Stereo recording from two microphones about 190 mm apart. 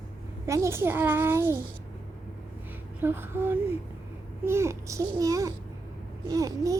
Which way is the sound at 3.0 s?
10° right (ahead or behind).